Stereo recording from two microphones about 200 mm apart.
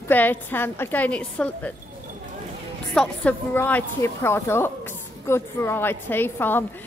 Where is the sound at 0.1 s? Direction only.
10° left (ahead or behind).